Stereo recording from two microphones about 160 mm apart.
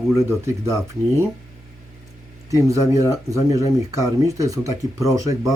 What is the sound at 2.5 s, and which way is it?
Speech, 20° right (ahead or behind).